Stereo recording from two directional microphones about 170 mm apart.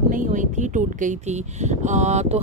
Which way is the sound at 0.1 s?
50° right (ahead or behind).